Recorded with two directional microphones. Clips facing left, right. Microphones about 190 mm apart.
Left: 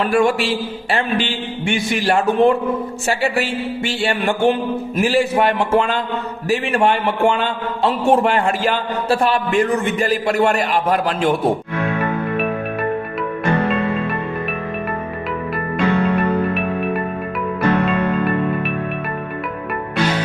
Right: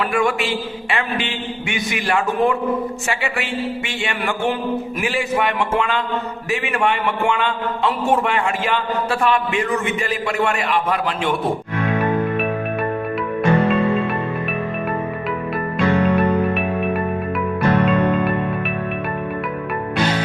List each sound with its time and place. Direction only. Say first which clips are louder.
0.0 s a man's voice: left 4 dB; 30° left (ahead or behind)